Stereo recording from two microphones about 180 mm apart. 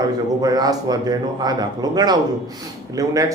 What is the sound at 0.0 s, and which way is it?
Speech, 20° right (ahead or behind).